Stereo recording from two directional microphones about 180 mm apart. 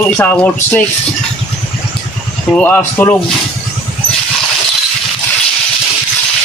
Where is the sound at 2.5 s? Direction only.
10° left (ahead or behind).